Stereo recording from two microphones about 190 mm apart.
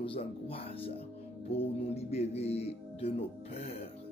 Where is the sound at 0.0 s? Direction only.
30° left (ahead or behind).